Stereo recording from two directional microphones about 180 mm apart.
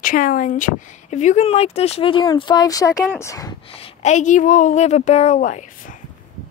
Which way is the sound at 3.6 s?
30° left (ahead or behind).